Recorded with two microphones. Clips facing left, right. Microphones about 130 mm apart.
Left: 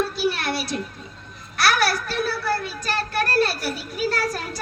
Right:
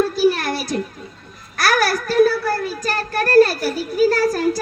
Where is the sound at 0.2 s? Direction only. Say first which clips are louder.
Right 7 dB; 40° right (ahead or behind).